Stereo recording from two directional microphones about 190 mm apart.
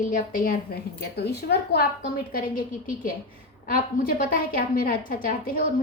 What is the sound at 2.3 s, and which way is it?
A woman's voice, 45° left (ahead or behind).